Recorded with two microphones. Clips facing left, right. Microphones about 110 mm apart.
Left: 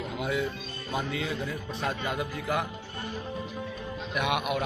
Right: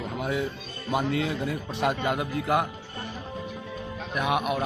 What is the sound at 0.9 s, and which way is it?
Speech, 60° right (ahead or behind).